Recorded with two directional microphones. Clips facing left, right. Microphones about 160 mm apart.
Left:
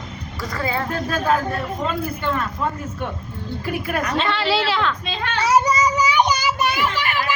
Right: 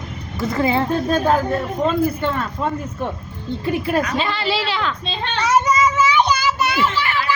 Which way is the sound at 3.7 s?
25° right (ahead or behind).